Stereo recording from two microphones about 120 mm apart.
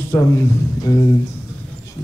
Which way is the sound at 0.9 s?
35° left (ahead or behind).